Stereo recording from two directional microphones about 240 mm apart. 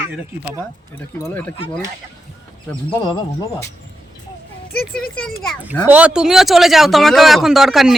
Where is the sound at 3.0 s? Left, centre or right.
Centre.